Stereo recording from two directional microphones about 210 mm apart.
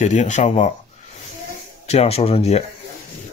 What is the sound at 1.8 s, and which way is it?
Speech, 30° left (ahead or behind).